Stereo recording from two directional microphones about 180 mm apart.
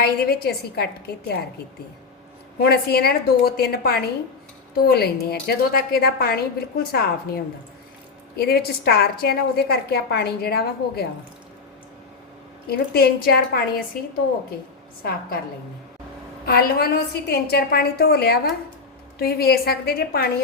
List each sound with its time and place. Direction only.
0.0 s a woman's voice: 60° left (ahead or behind)
2.6 s a woman's voice: 60° left (ahead or behind)
12.6 s a woman's voice: 60° left (ahead or behind)
16.5 s a woman's voice: 60° left (ahead or behind)